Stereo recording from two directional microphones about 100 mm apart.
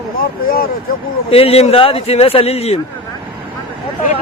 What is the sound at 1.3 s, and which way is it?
Speech, 75° left (ahead or behind).